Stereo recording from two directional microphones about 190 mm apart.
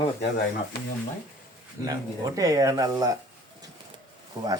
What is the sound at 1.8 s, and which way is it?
Speech, 20° right (ahead or behind).